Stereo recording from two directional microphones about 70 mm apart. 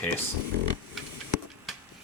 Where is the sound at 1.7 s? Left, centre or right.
Centre.